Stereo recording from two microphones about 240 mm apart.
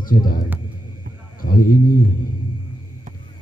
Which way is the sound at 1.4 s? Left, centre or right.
Left.